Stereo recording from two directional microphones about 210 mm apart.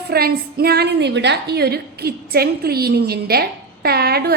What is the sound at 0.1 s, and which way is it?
A woman's voice, 45° right (ahead or behind).